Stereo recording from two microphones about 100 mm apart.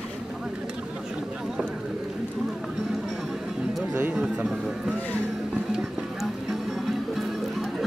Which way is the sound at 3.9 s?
15° right (ahead or behind).